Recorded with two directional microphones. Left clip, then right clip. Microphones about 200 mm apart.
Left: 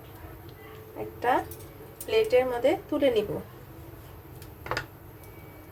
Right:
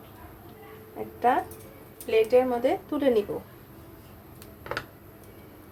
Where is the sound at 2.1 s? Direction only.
20° right (ahead or behind).